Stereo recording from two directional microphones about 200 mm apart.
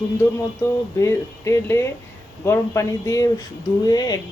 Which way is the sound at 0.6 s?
15° left (ahead or behind).